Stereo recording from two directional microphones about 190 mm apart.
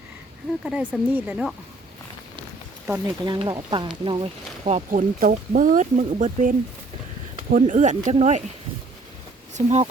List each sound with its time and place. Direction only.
0.6 s speech: 5° right (ahead or behind)
2.9 s speech: 15° right (ahead or behind); by 6.5 s 40° right (ahead or behind)
7.5 s speech: 40° right (ahead or behind)
9.6 s speech: 35° right (ahead or behind)